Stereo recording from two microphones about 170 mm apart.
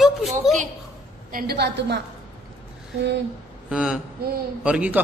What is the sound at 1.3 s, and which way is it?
Speech, 60° right (ahead or behind).